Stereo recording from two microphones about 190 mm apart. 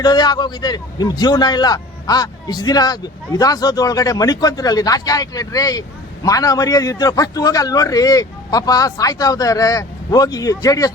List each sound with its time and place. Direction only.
0.0 s a man's voice: 20° left (ahead or behind)